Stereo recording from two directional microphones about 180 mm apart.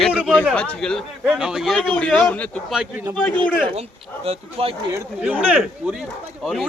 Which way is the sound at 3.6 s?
35° right (ahead or behind).